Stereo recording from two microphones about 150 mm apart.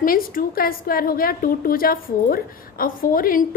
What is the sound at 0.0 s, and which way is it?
A woman's voice, 70° left (ahead or behind).